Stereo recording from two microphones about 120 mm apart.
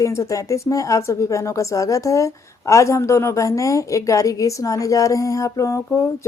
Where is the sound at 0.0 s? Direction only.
25° left (ahead or behind).